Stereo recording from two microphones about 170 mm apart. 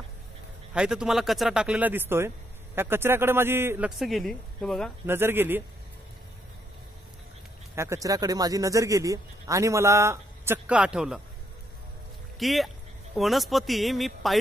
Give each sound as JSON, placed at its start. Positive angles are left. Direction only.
{"t": 0.7, "sound": "speech", "side_deg": -5}
{"t": 4.0, "sound": "speech", "side_deg": 0}
{"t": 5.0, "sound": "speech", "side_deg": -15}
{"t": 7.7, "sound": "speech", "side_deg": -15}
{"t": 12.4, "sound": "speech", "side_deg": 0}